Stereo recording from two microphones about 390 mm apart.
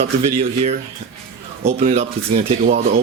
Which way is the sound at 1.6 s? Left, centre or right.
Centre.